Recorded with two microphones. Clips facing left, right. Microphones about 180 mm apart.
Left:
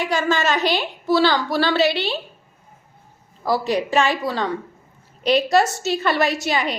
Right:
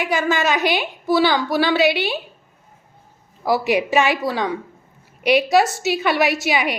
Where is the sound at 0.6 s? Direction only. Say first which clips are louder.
Right 1 dB; 15° right (ahead or behind).